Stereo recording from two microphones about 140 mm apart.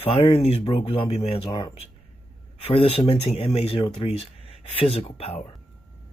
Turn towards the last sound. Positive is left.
turn(degrees=45)  # may be behind; listen again after turning